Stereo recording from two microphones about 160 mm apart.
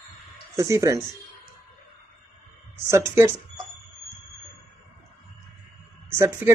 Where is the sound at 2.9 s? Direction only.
15° right (ahead or behind).